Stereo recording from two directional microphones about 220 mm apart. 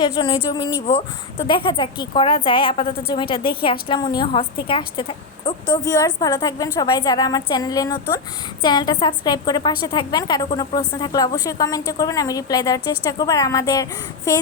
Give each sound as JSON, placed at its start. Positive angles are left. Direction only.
{"t": 0.0, "sound": "a woman's voice", "side_deg": 20}